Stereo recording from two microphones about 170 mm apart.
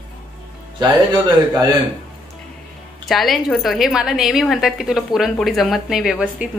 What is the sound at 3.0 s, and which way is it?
Speech, centre (ahead or behind).